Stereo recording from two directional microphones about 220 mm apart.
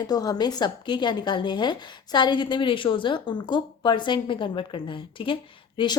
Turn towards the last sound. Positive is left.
turn(degrees=20)  # may be behind; listen again after turning